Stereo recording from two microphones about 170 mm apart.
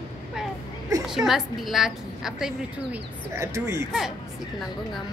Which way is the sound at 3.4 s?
20° right (ahead or behind).